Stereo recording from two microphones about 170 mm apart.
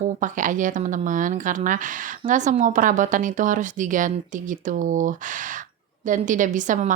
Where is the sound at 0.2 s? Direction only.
50° right (ahead or behind).